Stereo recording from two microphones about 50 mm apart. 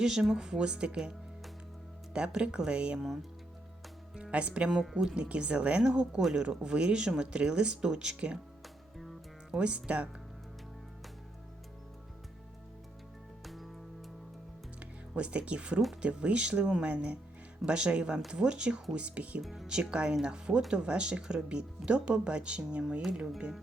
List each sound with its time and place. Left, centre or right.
0.0 s speech: centre
2.1 s speech: right
3.0 s speech: centre
4.1 s speech: right
4.7 s speech: centre
5.1 s speech: centre
9.0 s music: centre
9.6 s speech: right
13.4 s music: centre
14.8 s speech: right
19.4 s speech: centre
19.6 s speech: centre